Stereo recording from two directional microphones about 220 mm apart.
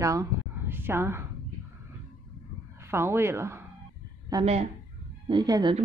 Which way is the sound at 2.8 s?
10° right (ahead or behind).